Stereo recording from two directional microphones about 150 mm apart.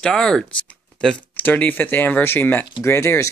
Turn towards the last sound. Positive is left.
turn(degrees=15)  # may be behind; listen again after turning